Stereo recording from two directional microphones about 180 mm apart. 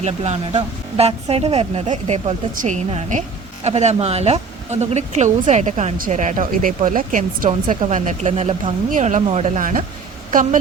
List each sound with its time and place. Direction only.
0.0 s speech: 40° right (ahead or behind)